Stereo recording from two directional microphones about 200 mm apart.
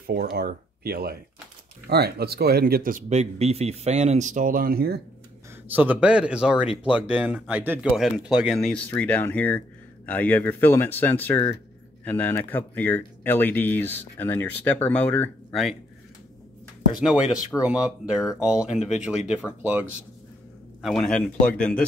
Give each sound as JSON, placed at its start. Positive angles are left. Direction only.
{"t": 0.0, "sound": "speech", "side_deg": -50}
{"t": 5.7, "sound": "speech", "side_deg": -10}
{"t": 16.9, "sound": "speech", "side_deg": -5}
{"t": 20.8, "sound": "speech", "side_deg": 5}